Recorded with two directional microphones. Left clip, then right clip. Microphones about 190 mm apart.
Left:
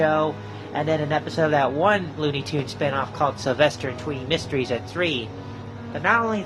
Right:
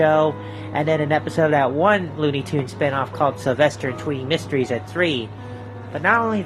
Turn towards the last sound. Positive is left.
turn(degrees=-30)  # may be behind; listen again after turning